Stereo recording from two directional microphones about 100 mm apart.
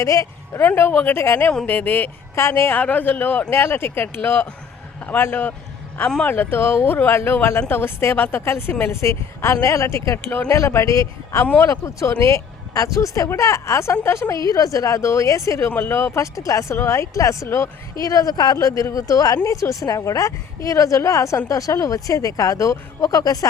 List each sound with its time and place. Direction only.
0.0 s a woman's voice: 30° left (ahead or behind)
0.6 s a woman's voice: 20° left (ahead or behind); by 23.5 s 35° left (ahead or behind)